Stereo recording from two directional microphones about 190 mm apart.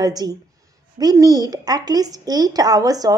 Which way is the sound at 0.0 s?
20° right (ahead or behind).